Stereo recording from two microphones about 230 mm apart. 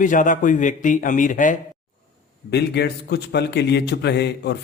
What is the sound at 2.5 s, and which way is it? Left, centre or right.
A man's voice, left.